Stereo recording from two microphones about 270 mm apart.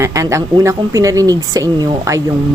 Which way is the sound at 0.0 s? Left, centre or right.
Centre.